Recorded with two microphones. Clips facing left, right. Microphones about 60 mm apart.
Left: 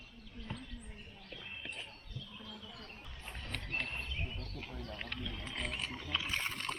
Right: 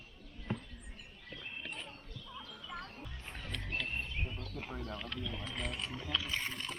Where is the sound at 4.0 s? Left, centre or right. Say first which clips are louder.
Right 2 dB; right.